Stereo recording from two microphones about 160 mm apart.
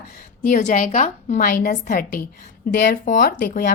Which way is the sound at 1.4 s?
65° left (ahead or behind).